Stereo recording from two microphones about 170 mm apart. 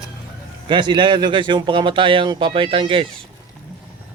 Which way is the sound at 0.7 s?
25° right (ahead or behind).